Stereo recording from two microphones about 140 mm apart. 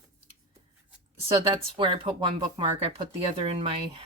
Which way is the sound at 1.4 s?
35° right (ahead or behind).